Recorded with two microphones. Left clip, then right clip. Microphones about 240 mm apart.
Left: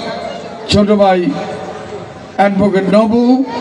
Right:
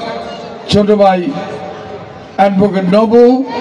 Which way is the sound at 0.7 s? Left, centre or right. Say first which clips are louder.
Right 1 dB; right.